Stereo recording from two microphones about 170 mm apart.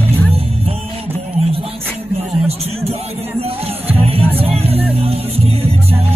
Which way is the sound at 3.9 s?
35° right (ahead or behind).